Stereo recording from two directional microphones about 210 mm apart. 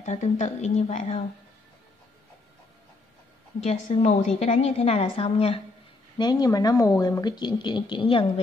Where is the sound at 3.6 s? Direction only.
30° left (ahead or behind).